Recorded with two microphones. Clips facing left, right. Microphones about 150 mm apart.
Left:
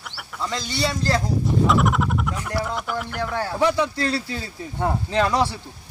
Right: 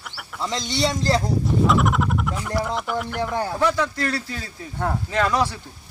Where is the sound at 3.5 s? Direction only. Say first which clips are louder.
Left 3 dB; 15° left (ahead or behind).